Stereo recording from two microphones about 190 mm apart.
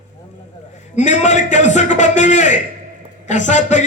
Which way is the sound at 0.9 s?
40° left (ahead or behind).